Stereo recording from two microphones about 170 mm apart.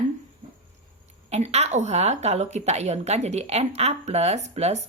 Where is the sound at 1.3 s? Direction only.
40° right (ahead or behind).